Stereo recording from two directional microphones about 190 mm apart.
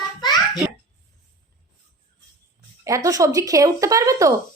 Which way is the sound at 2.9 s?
15° right (ahead or behind).